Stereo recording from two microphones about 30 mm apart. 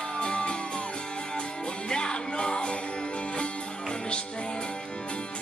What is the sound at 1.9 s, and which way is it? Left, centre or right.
Music, left.